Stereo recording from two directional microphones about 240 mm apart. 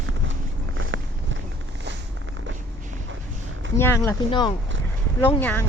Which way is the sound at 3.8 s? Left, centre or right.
Centre.